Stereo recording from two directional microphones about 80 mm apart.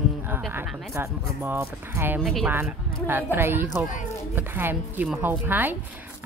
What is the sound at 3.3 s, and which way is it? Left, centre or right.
Speech, right.